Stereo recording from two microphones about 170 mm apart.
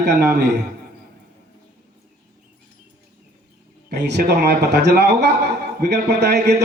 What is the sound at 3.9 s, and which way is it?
A man's voice, 75° right (ahead or behind).